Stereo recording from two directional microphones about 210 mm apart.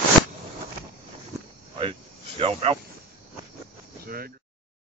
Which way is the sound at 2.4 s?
25° right (ahead or behind).